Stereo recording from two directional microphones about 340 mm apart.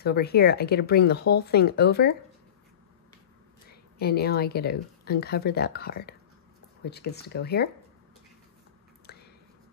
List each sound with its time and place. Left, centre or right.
0.0 s speech: left
4.0 s speech: left